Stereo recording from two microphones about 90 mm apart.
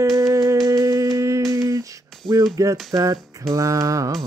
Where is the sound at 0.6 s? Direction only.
40° right (ahead or behind).